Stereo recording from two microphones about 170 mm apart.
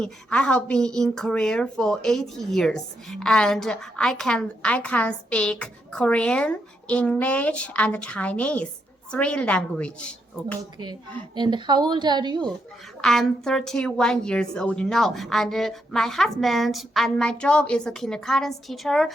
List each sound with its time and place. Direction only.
0.0 s a woman's voice: 5° left (ahead or behind)
11.3 s a woman's voice: 25° right (ahead or behind)
13.0 s speech: centre (ahead or behind)